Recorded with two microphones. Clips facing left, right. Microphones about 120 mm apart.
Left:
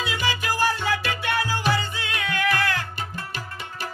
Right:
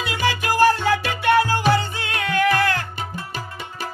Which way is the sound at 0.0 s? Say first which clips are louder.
Right 4 dB; 60° right (ahead or behind).